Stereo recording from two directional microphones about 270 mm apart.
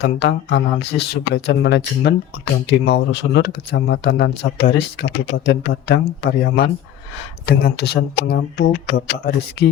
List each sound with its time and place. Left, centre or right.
0.0 s speech: left